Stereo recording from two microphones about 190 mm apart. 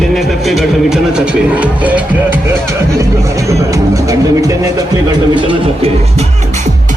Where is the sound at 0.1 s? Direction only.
Centre (ahead or behind).